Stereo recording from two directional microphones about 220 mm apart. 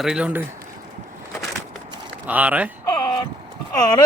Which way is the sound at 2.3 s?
5° right (ahead or behind).